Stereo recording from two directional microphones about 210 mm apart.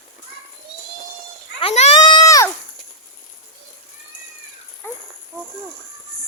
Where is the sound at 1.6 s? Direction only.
30° left (ahead or behind).